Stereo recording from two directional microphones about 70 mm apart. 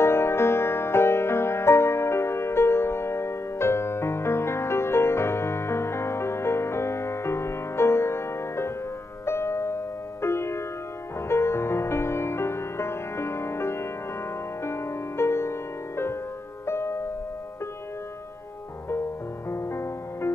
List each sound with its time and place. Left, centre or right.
0.0 s music: left
16.6 s music: left
19.5 s music: left